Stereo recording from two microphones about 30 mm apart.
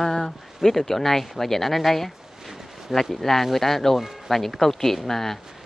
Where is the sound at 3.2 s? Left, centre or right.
Centre.